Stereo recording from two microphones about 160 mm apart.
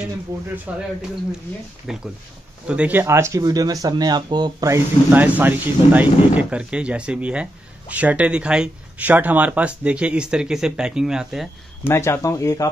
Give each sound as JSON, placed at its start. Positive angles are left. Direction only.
{"t": 0.3, "sound": "speech", "side_deg": -20}
{"t": 1.9, "sound": "speech", "side_deg": 0}
{"t": 11.8, "sound": "speech", "side_deg": 15}